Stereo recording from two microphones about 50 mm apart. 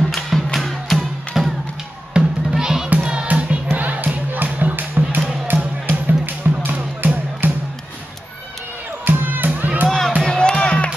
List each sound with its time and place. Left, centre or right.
0.1 s music: centre
2.1 s music: centre
2.9 s music: right
3.7 s music: right
6.5 s music: right
7.0 s music: right
9.0 s music: right
9.8 s music: centre